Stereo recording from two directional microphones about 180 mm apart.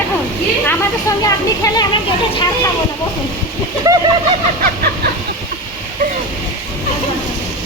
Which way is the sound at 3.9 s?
20° right (ahead or behind).